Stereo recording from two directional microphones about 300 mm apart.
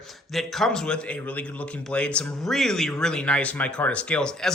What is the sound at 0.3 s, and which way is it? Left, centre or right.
Speech, centre.